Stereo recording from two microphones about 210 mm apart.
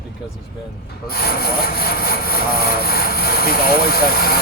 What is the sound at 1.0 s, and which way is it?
Speech, 45° left (ahead or behind).